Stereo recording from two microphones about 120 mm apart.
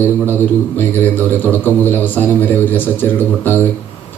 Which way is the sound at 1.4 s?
15° left (ahead or behind).